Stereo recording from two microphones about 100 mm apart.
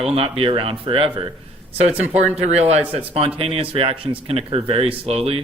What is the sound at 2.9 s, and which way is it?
A man's voice, 80° right.